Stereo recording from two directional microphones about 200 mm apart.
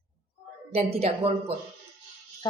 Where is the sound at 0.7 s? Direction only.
30° right (ahead or behind).